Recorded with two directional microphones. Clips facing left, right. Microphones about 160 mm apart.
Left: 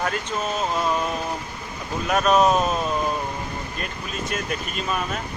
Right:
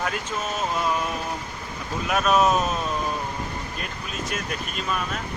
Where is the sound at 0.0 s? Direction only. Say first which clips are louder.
Left 2 dB; 5° right (ahead or behind).